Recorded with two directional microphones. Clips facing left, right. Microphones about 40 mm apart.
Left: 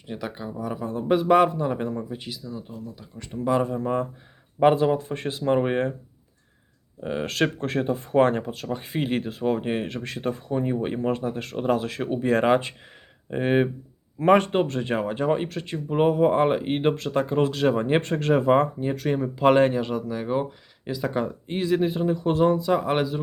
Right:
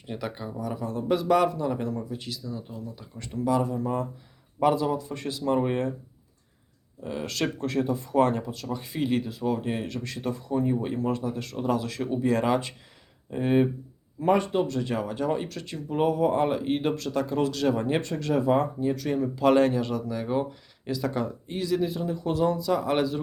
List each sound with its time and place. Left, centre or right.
0.1 s a man's voice: centre; by 2.4 s left
2.4 s speech: centre
3.4 s speech: left
7.0 s speech: left
14.2 s speech: left
21.5 s speech: left